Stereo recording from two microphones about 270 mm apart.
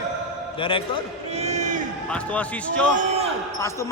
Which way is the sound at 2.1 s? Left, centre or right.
Centre.